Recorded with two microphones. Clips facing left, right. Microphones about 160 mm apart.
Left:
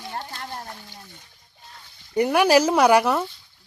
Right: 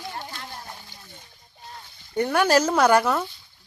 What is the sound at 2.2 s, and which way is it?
Speech, 10° left (ahead or behind).